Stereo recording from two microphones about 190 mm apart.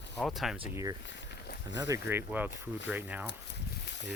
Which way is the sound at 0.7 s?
20° right (ahead or behind).